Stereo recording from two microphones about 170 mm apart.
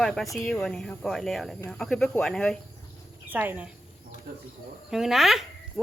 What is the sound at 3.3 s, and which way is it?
Speech, 10° right (ahead or behind).